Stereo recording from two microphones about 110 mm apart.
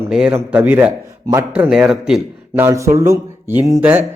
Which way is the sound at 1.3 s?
35° right (ahead or behind).